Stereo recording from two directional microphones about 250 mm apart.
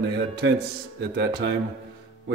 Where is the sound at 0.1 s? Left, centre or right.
Right.